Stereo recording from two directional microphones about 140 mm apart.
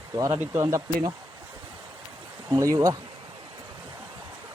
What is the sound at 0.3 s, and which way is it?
Speech, 15° right (ahead or behind).